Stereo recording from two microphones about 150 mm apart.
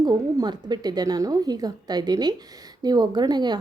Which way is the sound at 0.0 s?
25° right (ahead or behind).